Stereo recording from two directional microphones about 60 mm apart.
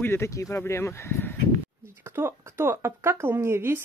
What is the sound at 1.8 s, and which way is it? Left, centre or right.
Speech, right.